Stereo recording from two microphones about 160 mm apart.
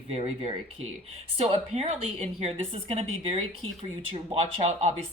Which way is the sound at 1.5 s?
40° right (ahead or behind).